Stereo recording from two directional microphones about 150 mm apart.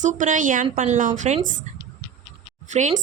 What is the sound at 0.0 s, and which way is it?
A woman's voice, 55° right (ahead or behind).